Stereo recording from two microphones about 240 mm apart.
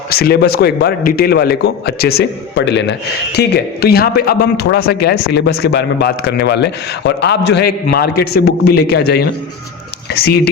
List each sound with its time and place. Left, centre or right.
0.1 s a man's voice: left